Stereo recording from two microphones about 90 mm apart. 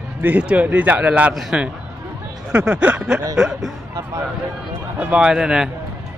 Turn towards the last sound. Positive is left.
turn(degrees=-10)  # may be behind; listen again after turning